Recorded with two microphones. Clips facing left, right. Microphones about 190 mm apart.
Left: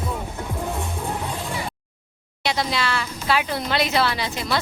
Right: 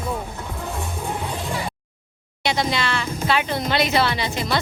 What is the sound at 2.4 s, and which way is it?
Speech, centre (ahead or behind).